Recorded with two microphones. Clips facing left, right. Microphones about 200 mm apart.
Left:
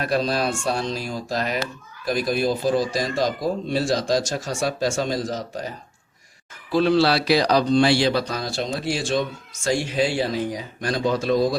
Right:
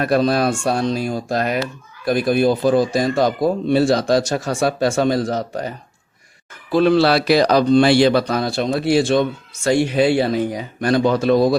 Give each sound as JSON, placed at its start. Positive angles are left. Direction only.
{"t": 0.0, "sound": "speech", "side_deg": -55}